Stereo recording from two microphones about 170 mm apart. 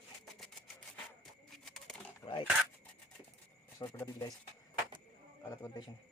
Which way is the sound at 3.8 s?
15° left (ahead or behind).